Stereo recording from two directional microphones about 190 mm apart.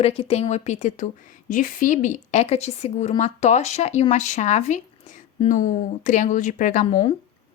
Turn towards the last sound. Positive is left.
turn(degrees=30)  # may be behind; listen again after turning